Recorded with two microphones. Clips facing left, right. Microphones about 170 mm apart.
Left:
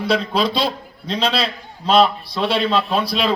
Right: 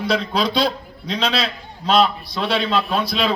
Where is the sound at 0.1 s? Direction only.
5° left (ahead or behind).